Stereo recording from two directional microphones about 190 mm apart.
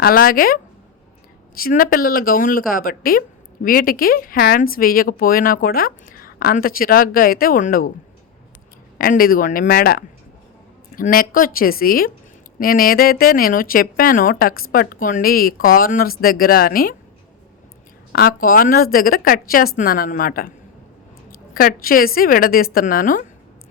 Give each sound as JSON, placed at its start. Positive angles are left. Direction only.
{"t": 0.0, "sound": "speech", "side_deg": 50}
{"t": 9.0, "sound": "speech", "side_deg": 50}
{"t": 18.1, "sound": "speech", "side_deg": 50}
{"t": 21.5, "sound": "speech", "side_deg": 50}